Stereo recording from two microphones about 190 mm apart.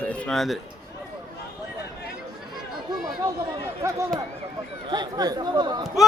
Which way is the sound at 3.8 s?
15° right (ahead or behind).